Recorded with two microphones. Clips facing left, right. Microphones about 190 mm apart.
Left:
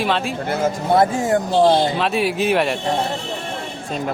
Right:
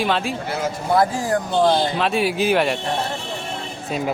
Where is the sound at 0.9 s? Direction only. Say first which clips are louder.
Left 2 dB; 25° left (ahead or behind).